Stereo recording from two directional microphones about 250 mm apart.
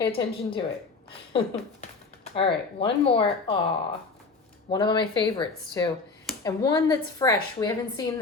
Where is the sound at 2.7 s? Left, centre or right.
Left.